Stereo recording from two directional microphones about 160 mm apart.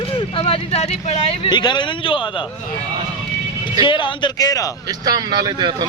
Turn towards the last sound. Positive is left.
turn(degrees=-25)  # may be behind; listen again after turning